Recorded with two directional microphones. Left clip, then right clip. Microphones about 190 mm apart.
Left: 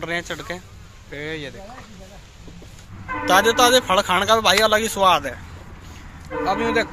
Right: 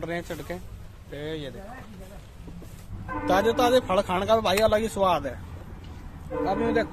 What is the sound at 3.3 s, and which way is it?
Speech, 5° left (ahead or behind).